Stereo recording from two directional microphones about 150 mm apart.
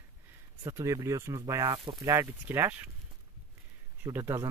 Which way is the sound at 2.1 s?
15° right (ahead or behind).